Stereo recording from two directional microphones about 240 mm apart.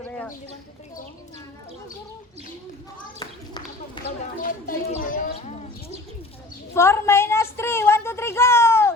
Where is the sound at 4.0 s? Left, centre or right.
Centre.